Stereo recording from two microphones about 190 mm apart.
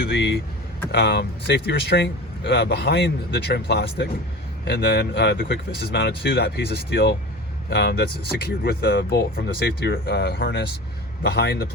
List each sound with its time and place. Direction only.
0.0 s speech: 60° left (ahead or behind)